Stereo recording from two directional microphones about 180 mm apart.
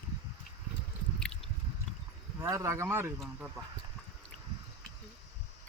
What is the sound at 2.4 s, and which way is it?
Speech, 15° right (ahead or behind).